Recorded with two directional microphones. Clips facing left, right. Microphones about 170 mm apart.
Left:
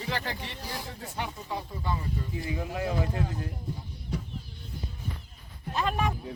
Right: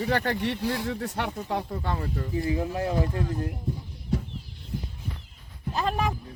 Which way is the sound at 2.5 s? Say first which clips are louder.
Right 3 dB; 35° right (ahead or behind).